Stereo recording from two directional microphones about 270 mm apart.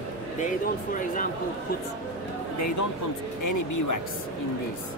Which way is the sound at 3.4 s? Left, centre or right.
Left.